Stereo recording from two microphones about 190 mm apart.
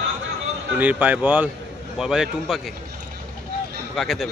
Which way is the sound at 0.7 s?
10° right (ahead or behind).